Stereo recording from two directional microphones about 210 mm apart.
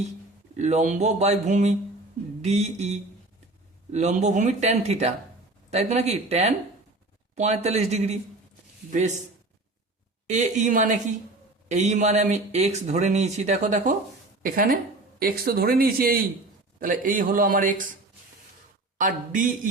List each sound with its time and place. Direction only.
0.5 s speech: 35° right (ahead or behind)
10.2 s speech: 35° right (ahead or behind)
18.9 s speech: 40° right (ahead or behind)